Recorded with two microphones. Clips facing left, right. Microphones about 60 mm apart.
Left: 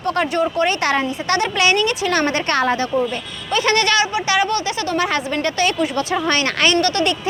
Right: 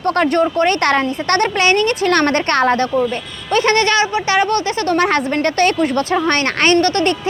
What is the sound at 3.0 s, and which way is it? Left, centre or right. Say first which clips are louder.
A woman's voice: right 3 dB; right.